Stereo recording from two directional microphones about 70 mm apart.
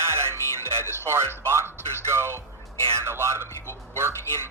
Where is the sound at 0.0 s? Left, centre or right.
Right.